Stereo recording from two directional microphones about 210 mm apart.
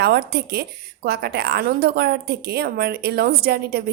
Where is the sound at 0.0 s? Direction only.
50° right (ahead or behind).